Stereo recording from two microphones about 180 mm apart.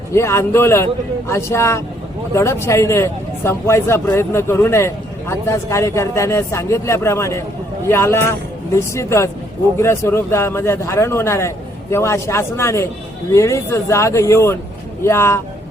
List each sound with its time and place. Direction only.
0.1 s a man's voice: 15° left (ahead or behind)